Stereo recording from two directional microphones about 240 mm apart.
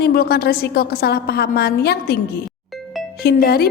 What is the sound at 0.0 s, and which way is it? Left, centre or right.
Speech, left.